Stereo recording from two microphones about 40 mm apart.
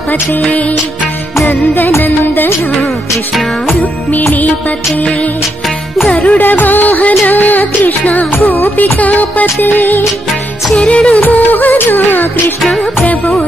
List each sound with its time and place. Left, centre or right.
1.4 s music: left
6.1 s music: left
6.4 s music: left
10.7 s music: left
11.2 s music: left